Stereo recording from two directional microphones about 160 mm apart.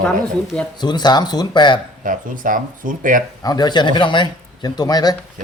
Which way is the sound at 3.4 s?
25° left (ahead or behind).